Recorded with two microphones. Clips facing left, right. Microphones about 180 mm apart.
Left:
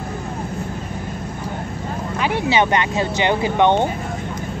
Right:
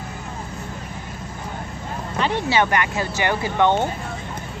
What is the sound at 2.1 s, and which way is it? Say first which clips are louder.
Speech: left 2 dB; 10° left (ahead or behind).